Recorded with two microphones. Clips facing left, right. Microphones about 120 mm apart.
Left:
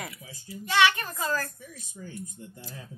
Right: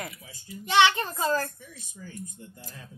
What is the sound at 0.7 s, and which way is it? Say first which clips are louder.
Speech: right 2 dB; 25° right (ahead or behind).